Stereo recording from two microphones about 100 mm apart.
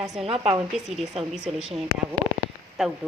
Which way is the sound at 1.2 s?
90° right.